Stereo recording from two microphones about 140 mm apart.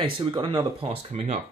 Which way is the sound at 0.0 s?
35° right (ahead or behind).